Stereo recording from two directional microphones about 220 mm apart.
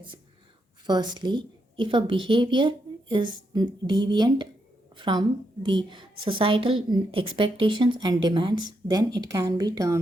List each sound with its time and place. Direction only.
0.9 s a woman's voice: 20° right (ahead or behind)